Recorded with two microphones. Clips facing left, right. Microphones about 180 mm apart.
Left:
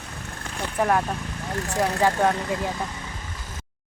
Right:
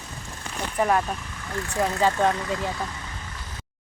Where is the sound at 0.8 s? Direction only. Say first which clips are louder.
Even; centre (ahead or behind).